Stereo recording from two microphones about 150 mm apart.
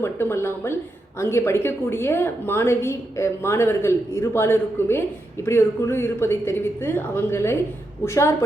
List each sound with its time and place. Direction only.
0.0 s a woman's voice: 15° left (ahead or behind)